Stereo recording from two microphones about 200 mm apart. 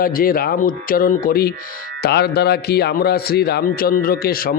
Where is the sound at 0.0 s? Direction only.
45° left (ahead or behind).